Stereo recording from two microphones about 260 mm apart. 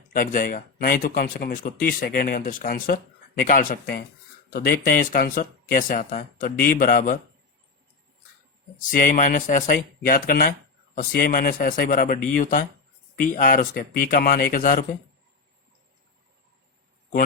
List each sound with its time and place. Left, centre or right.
0.1 s speech: left
8.8 s speech: left